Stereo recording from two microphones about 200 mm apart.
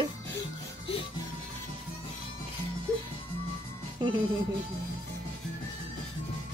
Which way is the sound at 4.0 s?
25° right (ahead or behind).